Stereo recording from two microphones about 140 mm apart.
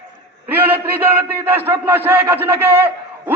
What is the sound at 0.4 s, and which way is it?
A man's voice, 15° right (ahead or behind).